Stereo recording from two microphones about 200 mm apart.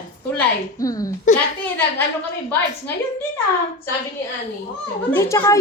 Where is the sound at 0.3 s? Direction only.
15° left (ahead or behind).